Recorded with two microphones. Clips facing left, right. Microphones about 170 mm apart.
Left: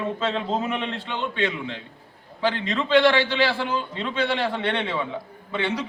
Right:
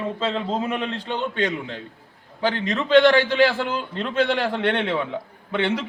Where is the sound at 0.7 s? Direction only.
40° right (ahead or behind).